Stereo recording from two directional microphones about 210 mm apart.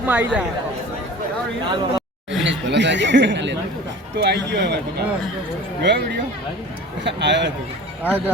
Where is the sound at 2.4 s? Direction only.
55° right (ahead or behind).